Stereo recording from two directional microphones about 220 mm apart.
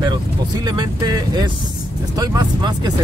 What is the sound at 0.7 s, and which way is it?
Speech, 15° right (ahead or behind).